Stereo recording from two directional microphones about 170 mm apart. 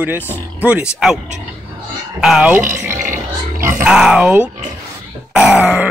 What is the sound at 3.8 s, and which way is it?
Speech, 5° right (ahead or behind).